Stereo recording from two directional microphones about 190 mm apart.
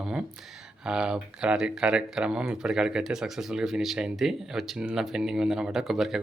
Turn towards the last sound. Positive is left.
turn(degrees=0)  # may be behind; listen again after turning